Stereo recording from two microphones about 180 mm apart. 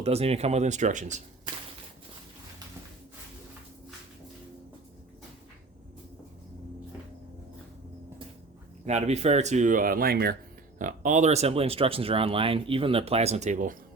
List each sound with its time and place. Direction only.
0.0 s speech: 35° right (ahead or behind)
8.9 s speech: 40° right (ahead or behind); by 10.3 s 60° right (ahead or behind)
10.8 s speech: 45° right (ahead or behind)